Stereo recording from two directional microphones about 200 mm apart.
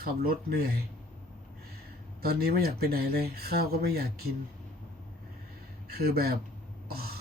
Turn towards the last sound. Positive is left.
turn(degrees=-50)  # may be behind; listen again after turning